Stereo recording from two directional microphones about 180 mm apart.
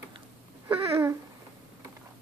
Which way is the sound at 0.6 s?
15° right (ahead or behind).